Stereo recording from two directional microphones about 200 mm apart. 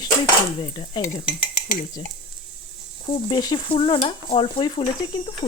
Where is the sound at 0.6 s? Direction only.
25° left (ahead or behind).